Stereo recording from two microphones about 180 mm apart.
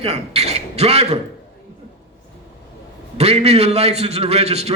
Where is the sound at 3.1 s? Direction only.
35° right (ahead or behind).